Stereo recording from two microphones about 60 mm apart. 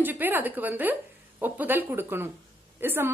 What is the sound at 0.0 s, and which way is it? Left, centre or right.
A woman's voice, right.